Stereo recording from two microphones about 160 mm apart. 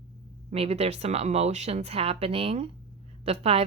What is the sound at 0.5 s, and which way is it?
A woman's voice, 40° right (ahead or behind).